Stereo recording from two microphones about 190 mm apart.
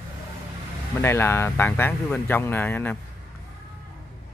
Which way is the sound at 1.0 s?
10° left (ahead or behind).